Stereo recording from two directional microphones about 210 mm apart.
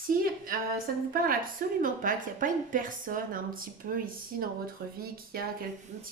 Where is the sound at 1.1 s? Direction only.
40° right (ahead or behind).